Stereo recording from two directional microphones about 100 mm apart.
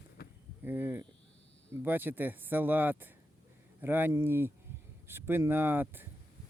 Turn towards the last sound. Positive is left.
turn(degrees=-20)  # may be behind; listen again after turning